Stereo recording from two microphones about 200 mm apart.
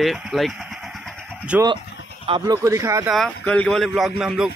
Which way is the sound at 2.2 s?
20° right (ahead or behind).